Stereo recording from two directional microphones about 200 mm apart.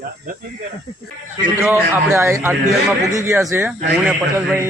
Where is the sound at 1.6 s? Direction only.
10° right (ahead or behind).